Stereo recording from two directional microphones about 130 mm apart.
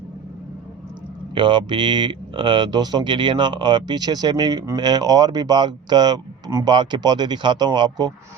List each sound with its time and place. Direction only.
1.3 s speech: 40° right (ahead or behind)